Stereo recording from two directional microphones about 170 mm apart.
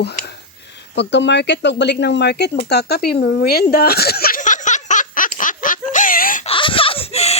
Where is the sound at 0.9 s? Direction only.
90° left; by 6.5 s 55° left (ahead or behind).